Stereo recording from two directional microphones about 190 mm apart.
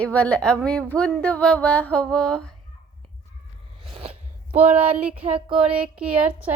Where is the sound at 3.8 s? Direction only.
30° right (ahead or behind).